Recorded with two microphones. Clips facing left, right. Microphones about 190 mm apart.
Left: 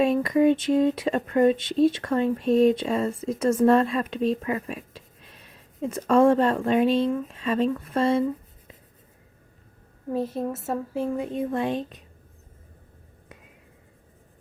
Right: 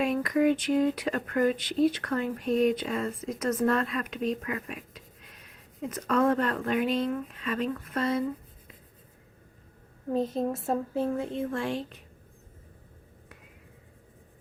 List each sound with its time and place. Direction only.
0.0 s speech: 25° left (ahead or behind)
10.1 s speech: 10° left (ahead or behind)